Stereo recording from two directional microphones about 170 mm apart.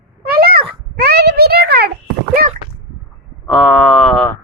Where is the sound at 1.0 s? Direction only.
70° right (ahead or behind).